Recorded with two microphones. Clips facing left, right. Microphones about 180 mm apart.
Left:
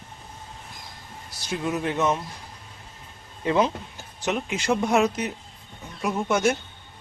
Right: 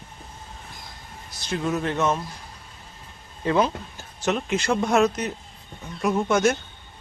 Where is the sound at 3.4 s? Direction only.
20° left (ahead or behind).